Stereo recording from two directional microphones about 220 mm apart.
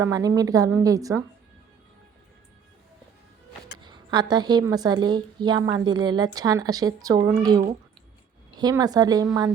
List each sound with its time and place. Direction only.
0.0 s speech: 15° right (ahead or behind)
3.8 s a woman's voice: 20° right (ahead or behind)